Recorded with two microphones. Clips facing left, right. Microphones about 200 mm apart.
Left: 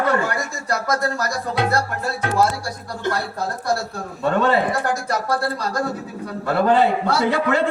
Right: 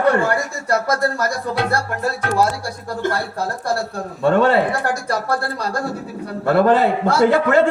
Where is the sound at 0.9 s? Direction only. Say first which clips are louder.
Right 3 dB; 50° right (ahead or behind).